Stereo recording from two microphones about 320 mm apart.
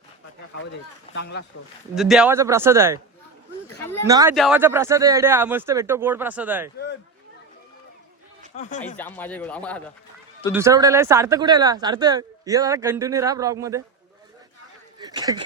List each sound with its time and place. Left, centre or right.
1.1 s speech: left
2.0 s speech: centre
4.0 s speech: centre
8.5 s speech: centre
9.0 s speech: centre
10.5 s speech: centre
14.9 s a sound: centre